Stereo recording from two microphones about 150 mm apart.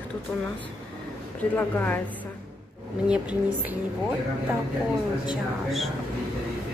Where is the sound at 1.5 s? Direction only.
10° left (ahead or behind).